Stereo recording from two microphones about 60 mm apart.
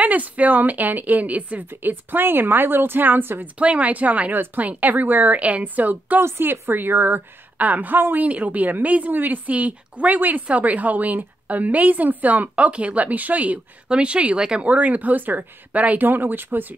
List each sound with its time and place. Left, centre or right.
0.0 s a woman's voice: right
3.5 s a woman's voice: right
6.2 s a woman's voice: right